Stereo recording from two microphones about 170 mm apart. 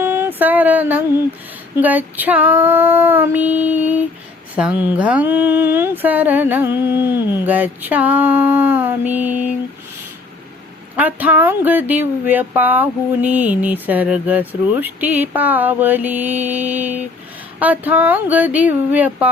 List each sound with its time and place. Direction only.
0.0 s a sound: 15° right (ahead or behind)
1.7 s speech: 10° right (ahead or behind)
10.9 s speech: 10° right (ahead or behind)